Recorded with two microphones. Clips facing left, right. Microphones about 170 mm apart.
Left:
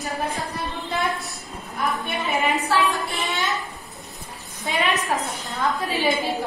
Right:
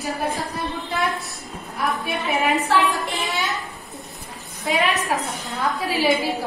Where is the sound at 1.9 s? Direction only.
Centre (ahead or behind).